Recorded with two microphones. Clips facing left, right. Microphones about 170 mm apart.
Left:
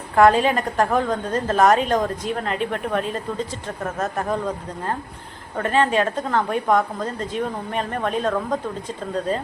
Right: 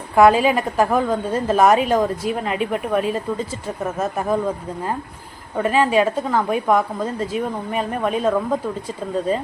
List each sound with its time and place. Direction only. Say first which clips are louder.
0.2 s a woman's voice: right 2 dB; 10° right (ahead or behind)